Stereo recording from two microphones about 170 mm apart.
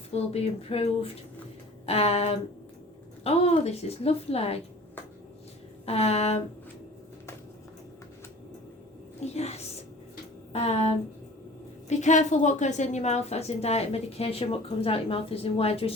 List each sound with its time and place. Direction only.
0.1 s a woman's voice: 35° left (ahead or behind)
5.8 s a woman's voice: 35° left (ahead or behind)
9.2 s a woman's voice: 40° left (ahead or behind)
11.9 s a woman's voice: 45° left (ahead or behind)